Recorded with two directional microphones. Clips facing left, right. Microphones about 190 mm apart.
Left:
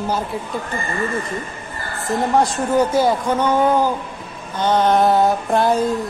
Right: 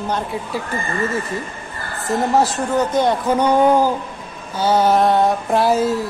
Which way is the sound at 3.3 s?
15° right (ahead or behind).